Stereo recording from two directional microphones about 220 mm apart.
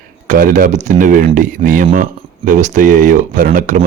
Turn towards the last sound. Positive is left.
turn(degrees=-35)  # may be behind; listen again after turning